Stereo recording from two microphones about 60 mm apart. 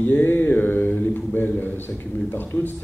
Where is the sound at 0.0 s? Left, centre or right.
Left.